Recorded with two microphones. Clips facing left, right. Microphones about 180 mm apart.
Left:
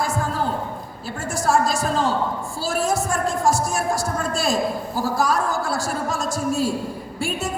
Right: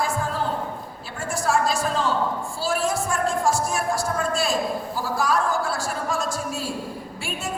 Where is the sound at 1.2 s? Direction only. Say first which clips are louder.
Left 2 dB; 40° left (ahead or behind).